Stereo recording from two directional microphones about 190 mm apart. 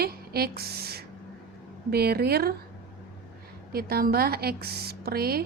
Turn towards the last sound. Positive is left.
turn(degrees=-55)  # may be behind; listen again after turning